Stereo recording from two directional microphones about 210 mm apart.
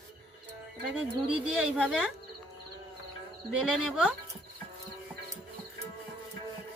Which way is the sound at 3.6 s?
5° right (ahead or behind).